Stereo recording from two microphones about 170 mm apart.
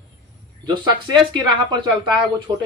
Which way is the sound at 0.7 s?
25° right (ahead or behind).